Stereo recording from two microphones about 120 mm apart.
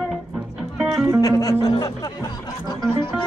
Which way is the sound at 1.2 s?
30° left (ahead or behind).